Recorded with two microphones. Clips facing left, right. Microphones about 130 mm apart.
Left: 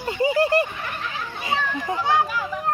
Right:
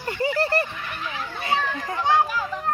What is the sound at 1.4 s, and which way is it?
Children playing, 20° left (ahead or behind).